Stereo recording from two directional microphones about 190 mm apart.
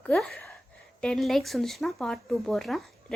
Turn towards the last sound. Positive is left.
turn(degrees=0)  # may be behind; listen again after turning